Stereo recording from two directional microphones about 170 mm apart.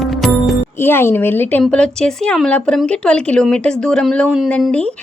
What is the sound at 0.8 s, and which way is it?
A woman's voice, 15° left (ahead or behind).